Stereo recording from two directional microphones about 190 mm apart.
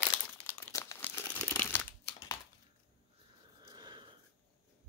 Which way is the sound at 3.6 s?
20° right (ahead or behind).